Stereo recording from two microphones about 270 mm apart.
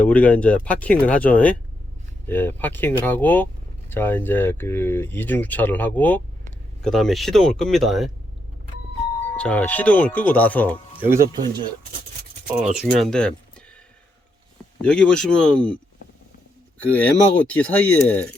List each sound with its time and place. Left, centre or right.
0.0 s speech: centre
9.3 s speech: centre
11.3 s speech: centre
12.7 s speech: centre
14.8 s speech: centre
16.8 s speech: centre